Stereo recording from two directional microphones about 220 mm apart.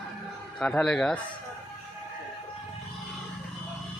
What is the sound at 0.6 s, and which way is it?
Speech, 5° left (ahead or behind).